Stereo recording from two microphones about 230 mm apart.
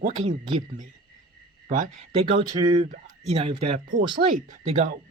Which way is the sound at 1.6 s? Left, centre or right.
Right.